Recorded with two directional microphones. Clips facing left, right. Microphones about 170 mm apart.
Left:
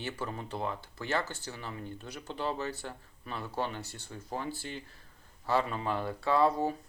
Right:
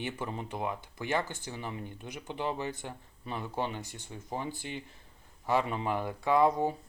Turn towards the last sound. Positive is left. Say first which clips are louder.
# right 1 dB
turn(degrees=-15)  # may be behind; listen again after turning